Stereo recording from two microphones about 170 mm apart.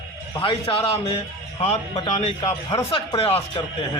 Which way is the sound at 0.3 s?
35° left (ahead or behind).